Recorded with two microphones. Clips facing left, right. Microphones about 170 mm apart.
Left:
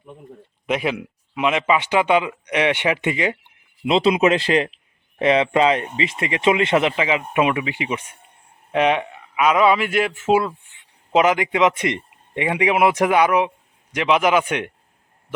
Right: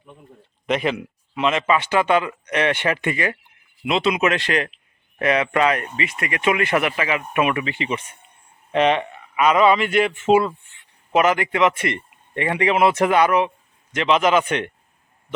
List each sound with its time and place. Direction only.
0.7 s speech: 5° left (ahead or behind)
3.8 s speech: 30° left (ahead or behind); by 10.5 s 5° left (ahead or behind)
11.1 s speech: 15° left (ahead or behind)